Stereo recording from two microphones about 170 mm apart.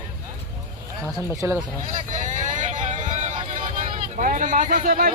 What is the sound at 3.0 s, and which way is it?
Music, 45° right (ahead or behind).